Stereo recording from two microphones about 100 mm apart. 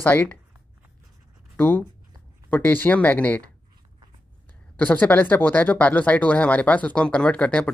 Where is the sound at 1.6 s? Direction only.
20° left (ahead or behind).